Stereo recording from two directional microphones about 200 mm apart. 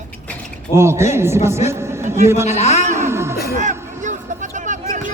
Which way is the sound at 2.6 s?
35° left (ahead or behind).